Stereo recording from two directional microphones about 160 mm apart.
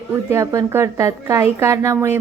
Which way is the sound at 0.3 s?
15° right (ahead or behind).